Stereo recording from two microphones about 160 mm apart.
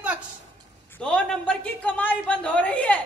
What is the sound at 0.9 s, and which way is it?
A man's voice, 5° left (ahead or behind).